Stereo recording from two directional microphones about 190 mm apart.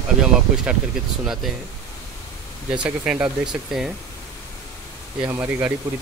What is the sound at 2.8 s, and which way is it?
Speech, 5° right (ahead or behind).